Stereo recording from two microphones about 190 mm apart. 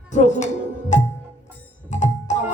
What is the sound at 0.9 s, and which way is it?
Music, 40° left (ahead or behind).